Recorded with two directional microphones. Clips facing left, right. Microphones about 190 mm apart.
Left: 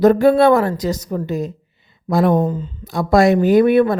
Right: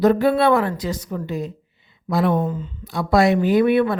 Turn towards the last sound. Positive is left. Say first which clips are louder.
# left 4 dB
turn(degrees=45)  # may be behind; listen again after turning